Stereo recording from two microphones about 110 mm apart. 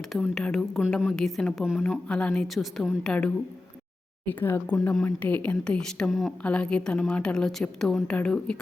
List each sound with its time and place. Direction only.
0.1 s a woman's voice: centre (ahead or behind)
2.0 s a woman's voice: 10° left (ahead or behind)
3.1 s a woman's voice: 10° left (ahead or behind)